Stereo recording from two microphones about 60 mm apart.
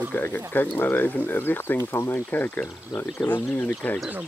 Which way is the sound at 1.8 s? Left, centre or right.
Left.